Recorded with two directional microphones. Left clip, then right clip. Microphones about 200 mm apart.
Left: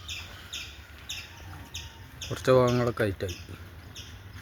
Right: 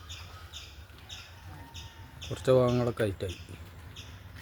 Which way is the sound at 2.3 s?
5° left (ahead or behind).